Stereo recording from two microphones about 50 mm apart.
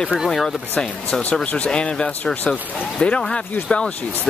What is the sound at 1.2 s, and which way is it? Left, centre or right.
Speech, left.